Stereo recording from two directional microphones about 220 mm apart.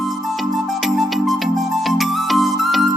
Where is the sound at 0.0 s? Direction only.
Centre (ahead or behind).